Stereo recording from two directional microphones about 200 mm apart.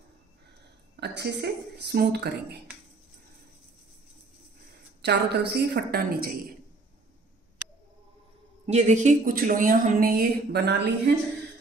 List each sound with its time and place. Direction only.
0.9 s a woman's voice: 55° right (ahead or behind)
5.0 s a woman's voice: 55° right (ahead or behind)
8.6 s speech: 35° right (ahead or behind); by 10.9 s 55° right (ahead or behind)